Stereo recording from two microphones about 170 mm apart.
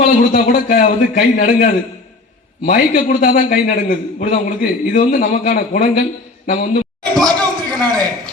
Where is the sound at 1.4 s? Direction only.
45° left (ahead or behind).